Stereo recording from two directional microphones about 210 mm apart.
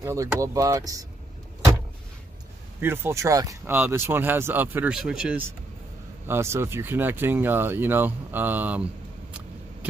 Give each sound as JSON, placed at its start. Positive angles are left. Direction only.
{"t": 0.0, "sound": "speech", "side_deg": -15}
{"t": 2.8, "sound": "speech", "side_deg": -10}